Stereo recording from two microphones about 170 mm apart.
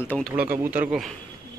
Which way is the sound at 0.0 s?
10° left (ahead or behind).